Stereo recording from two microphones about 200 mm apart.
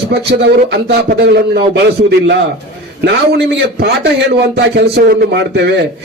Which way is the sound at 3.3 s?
55° right (ahead or behind).